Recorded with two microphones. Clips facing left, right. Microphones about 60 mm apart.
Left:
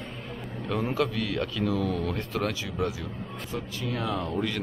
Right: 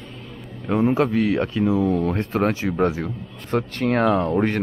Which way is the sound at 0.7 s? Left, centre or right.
Right.